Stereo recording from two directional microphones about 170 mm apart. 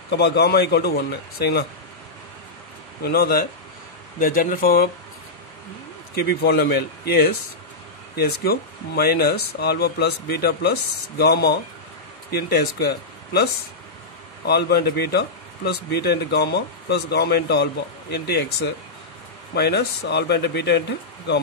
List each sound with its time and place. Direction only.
0.1 s speech: 80° left
3.0 s speech: 65° left (ahead or behind)
6.2 s speech: 65° left (ahead or behind)